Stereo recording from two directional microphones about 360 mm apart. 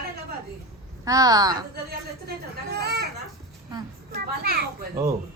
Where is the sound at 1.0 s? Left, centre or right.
Centre.